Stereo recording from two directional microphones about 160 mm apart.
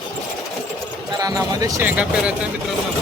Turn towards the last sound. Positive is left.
turn(degrees=-5)  # may be behind; listen again after turning